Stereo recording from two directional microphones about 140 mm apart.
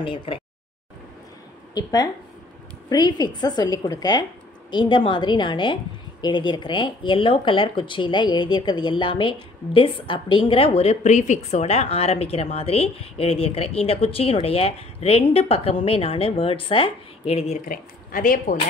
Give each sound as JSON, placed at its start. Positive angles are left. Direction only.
{"t": 0.0, "sound": "speech", "side_deg": 40}
{"t": 1.7, "sound": "a woman's voice", "side_deg": 25}
{"t": 17.6, "sound": "speech", "side_deg": 75}